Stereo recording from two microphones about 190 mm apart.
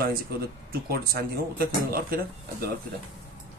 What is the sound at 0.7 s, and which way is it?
Speech, 55° right (ahead or behind).